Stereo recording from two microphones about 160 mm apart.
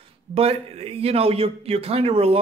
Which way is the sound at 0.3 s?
40° right (ahead or behind).